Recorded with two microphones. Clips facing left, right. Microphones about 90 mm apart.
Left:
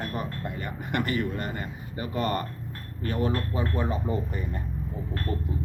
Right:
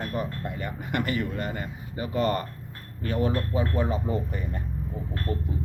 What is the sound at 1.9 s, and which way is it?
Speech, 25° right (ahead or behind).